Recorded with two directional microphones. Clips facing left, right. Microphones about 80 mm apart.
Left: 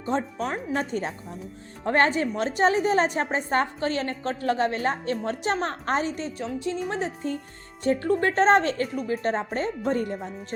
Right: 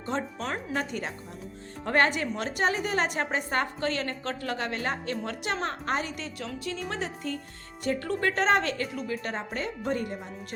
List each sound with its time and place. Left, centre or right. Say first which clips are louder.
0.8 s a woman's voice: left 4 dB; left